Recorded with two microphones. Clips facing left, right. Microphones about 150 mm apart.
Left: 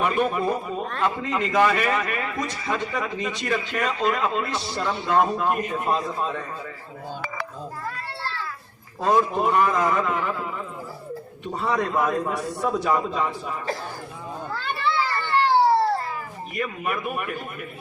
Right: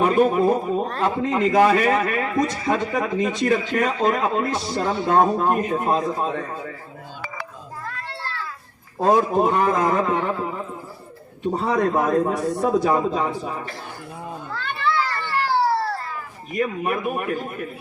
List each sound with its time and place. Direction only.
0.0 s a man's voice: 40° right (ahead or behind)
9.0 s a man's voice: 40° right (ahead or behind)
14.5 s children playing: 5° left (ahead or behind)
16.6 s a man's voice: 40° right (ahead or behind)